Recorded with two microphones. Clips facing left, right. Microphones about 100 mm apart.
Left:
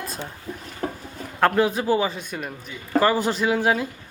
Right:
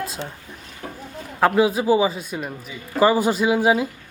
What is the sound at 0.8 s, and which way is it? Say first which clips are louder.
Chicken: left 6 dB; 45° left (ahead or behind).